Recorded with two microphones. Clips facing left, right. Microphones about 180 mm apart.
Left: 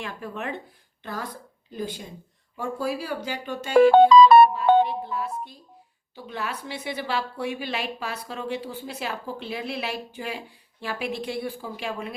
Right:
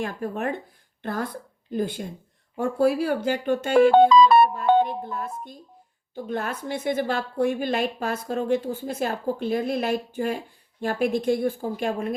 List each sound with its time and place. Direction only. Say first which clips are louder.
0.0 s a woman's voice: right 6 dB; 45° right (ahead or behind)